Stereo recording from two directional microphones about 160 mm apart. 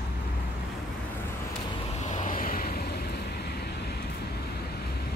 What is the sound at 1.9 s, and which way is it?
Vehicle, 45° left (ahead or behind).